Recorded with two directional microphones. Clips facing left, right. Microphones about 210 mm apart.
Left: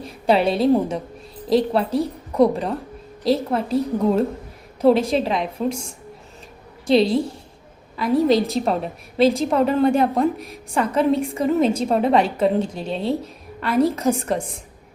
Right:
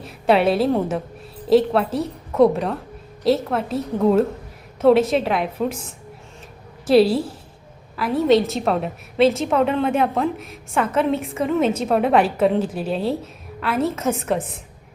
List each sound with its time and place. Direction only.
0.0 s a woman's voice: centre (ahead or behind)
6.8 s a woman's voice: 5° right (ahead or behind)
11.6 s a woman's voice: 30° left (ahead or behind)
11.9 s a woman's voice: centre (ahead or behind)